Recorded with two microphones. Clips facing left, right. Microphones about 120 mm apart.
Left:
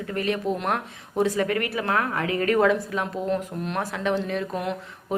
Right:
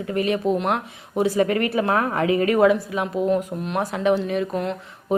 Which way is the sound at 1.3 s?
25° right (ahead or behind).